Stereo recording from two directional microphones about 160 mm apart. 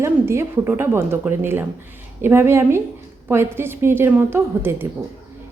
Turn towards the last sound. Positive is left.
turn(degrees=-15)  # may be behind; listen again after turning